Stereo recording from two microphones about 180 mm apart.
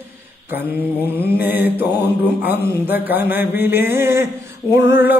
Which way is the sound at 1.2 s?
10° right (ahead or behind).